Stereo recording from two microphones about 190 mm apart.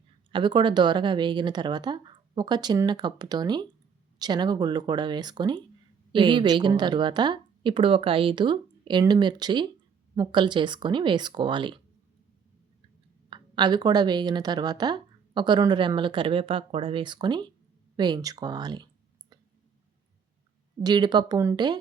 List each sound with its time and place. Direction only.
0.3 s speech: 25° right (ahead or behind)
13.3 s speech: 25° right (ahead or behind)
20.8 s speech: 20° right (ahead or behind)